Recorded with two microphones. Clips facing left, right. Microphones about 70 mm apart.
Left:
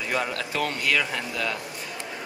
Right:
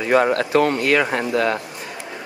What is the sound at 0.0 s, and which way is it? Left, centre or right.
Speech, right.